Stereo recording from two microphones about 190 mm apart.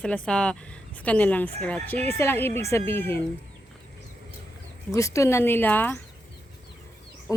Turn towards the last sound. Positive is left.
turn(degrees=10)  # may be behind; listen again after turning